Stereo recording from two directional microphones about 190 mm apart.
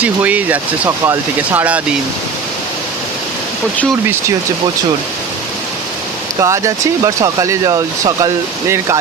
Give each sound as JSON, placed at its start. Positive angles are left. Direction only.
{"t": 0.0, "sound": "speech", "side_deg": -10}
{"t": 6.4, "sound": "speech", "side_deg": -15}